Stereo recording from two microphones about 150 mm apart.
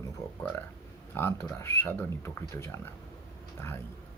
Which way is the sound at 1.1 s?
15° left (ahead or behind).